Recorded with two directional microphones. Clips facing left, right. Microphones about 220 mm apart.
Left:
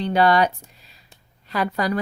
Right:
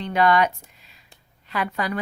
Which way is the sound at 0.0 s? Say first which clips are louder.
Left 2 dB; 35° left (ahead or behind).